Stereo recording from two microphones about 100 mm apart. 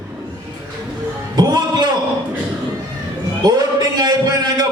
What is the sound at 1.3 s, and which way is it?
Speech, 45° right (ahead or behind).